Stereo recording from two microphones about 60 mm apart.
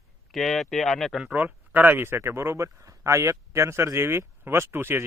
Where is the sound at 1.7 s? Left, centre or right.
Right.